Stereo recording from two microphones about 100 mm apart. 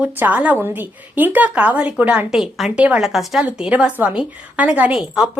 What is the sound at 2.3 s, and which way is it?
A woman's voice, 5° right (ahead or behind).